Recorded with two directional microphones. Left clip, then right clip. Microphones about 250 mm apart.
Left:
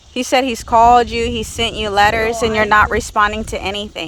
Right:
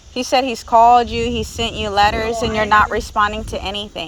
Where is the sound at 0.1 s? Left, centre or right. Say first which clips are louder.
Left 1 dB; left.